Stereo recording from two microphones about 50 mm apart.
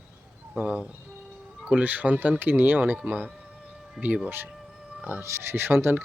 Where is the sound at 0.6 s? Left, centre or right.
Right.